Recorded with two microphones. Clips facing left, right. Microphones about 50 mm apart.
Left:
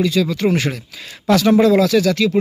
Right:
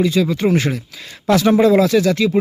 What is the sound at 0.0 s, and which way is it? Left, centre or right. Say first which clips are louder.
Speech: right 1 dB; centre.